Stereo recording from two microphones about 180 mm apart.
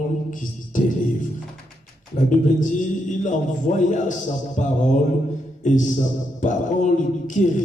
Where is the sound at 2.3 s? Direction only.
45° left (ahead or behind).